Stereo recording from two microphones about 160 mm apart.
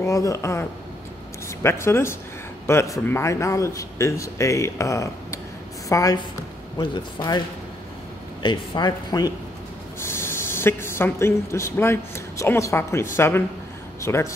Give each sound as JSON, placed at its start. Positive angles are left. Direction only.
{"t": 0.0, "sound": "a man's voice", "side_deg": 20}